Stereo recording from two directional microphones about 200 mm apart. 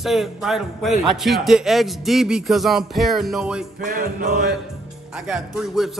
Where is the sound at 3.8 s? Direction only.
45° right (ahead or behind).